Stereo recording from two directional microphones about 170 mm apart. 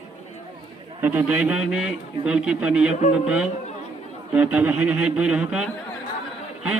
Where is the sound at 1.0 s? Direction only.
10° right (ahead or behind).